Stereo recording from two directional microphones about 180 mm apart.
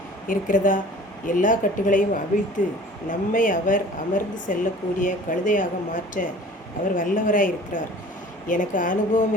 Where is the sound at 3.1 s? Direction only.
50° left (ahead or behind).